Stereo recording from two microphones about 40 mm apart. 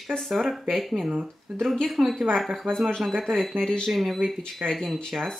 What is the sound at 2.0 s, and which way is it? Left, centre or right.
Speech, centre.